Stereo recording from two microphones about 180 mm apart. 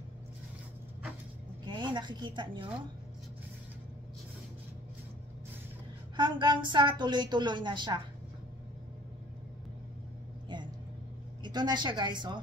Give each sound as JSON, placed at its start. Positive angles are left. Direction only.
{"t": 1.7, "sound": "speech", "side_deg": -25}
{"t": 6.1, "sound": "a woman's voice", "side_deg": -25}
{"t": 10.5, "sound": "vehicle", "side_deg": -25}
{"t": 11.4, "sound": "a woman's voice", "side_deg": -25}